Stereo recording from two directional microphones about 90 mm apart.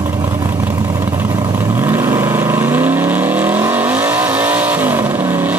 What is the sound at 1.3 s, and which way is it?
Vehicle, 40° right (ahead or behind).